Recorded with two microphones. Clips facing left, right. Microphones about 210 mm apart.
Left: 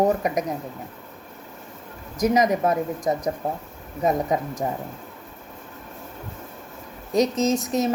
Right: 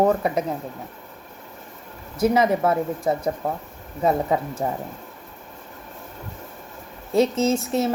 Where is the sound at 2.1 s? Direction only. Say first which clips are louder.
Right 1 dB; 15° left (ahead or behind).